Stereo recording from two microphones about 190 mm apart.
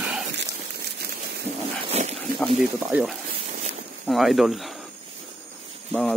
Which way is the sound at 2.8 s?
Centre (ahead or behind).